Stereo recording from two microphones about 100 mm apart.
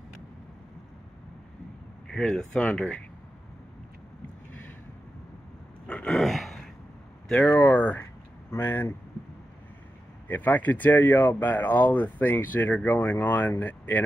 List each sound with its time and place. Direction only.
2.0 s speech: 5° left (ahead or behind)
5.9 s a sound: 10° left (ahead or behind)
7.4 s speech: 20° left (ahead or behind)
10.2 s speech: 15° left (ahead or behind)